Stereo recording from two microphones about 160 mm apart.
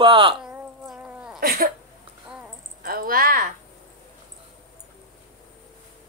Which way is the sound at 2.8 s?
65° right (ahead or behind).